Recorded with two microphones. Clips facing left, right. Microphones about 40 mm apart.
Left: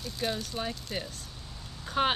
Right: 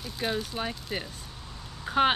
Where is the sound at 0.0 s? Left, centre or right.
Centre.